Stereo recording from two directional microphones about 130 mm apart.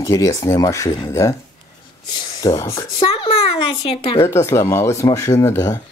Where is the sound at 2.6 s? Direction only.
25° left (ahead or behind).